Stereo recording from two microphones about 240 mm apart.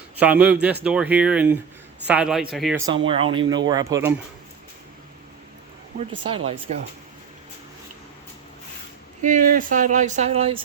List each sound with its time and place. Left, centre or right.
0.2 s speech: centre
2.7 s speech: centre
6.7 s speech: right
9.2 s speech: right